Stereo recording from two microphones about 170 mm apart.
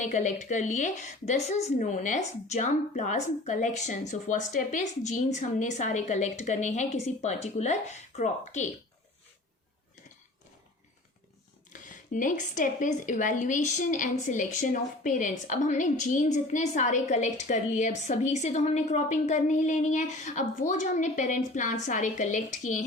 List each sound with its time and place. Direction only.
0.0 s a woman's voice: 45° left (ahead or behind)
11.7 s a woman's voice: 50° left (ahead or behind)